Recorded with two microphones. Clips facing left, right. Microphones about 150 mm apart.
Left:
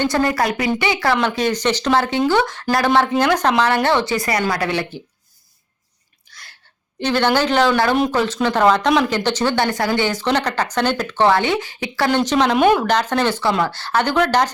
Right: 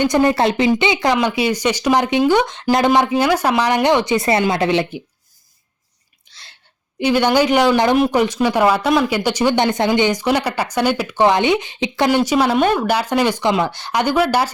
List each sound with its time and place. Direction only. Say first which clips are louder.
0.0 s speech: right 4 dB; 20° right (ahead or behind)
3.1 s speech: right 1 dB; 5° right (ahead or behind)
6.3 s a sound: left 2 dB; 25° right (ahead or behind)
7.0 s speech: right 3 dB; 10° right (ahead or behind)
12.5 s speech: left 2 dB; 5° left (ahead or behind)
12.8 s speech: right 1 dB; 10° right (ahead or behind)